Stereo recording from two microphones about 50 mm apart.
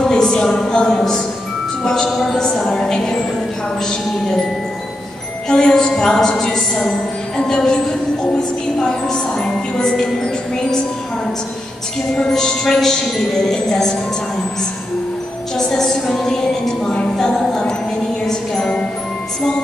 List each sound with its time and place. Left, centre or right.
0.0 s a sound: centre
0.3 s speech: centre
5.5 s speech: centre
12.2 s speech: centre
15.5 s music: centre